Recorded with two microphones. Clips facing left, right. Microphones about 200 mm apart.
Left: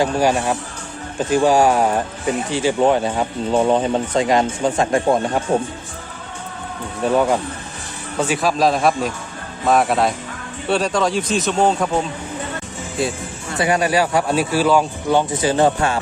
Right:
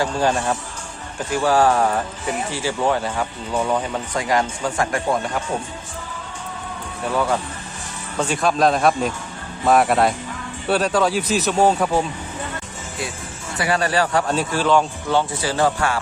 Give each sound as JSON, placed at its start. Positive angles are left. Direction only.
{"t": 0.0, "sound": "speech", "side_deg": 15}
{"t": 7.1, "sound": "speech", "side_deg": 20}
{"t": 8.2, "sound": "a man's voice", "side_deg": 5}
{"t": 13.6, "sound": "speech", "side_deg": 15}
{"t": 15.3, "sound": "speech", "side_deg": 20}